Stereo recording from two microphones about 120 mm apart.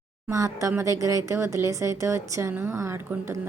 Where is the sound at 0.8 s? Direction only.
30° right (ahead or behind).